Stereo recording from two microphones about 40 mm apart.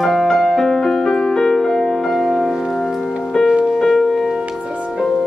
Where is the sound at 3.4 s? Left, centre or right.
Right.